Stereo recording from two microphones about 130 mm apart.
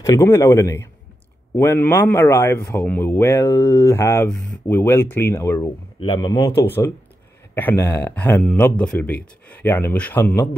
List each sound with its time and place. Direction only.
0.0 s a man's voice: 25° left (ahead or behind)
5.9 s a man's voice: 35° left (ahead or behind); by 10.3 s 10° left (ahead or behind)